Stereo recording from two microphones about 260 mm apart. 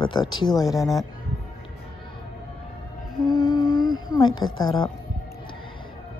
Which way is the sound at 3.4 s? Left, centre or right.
Centre.